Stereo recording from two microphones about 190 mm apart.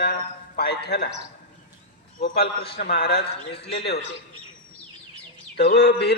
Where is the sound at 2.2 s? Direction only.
55° left (ahead or behind).